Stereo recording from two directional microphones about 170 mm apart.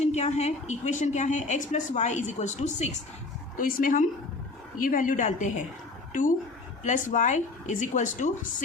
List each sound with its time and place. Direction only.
0.0 s a woman's voice: 40° left (ahead or behind)
6.8 s a woman's voice: 45° left (ahead or behind)